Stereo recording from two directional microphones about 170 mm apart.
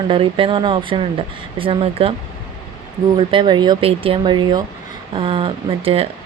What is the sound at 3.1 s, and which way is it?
Speech, 30° right (ahead or behind).